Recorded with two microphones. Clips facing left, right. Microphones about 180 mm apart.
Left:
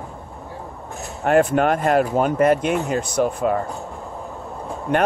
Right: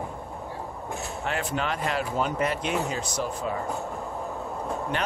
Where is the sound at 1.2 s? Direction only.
50° left (ahead or behind).